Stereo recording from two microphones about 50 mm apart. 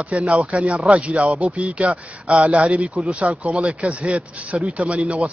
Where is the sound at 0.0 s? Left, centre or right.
Right.